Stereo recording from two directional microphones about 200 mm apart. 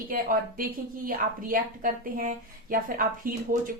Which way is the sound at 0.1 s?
45° right (ahead or behind).